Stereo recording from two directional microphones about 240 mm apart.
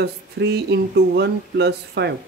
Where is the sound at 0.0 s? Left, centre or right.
Right.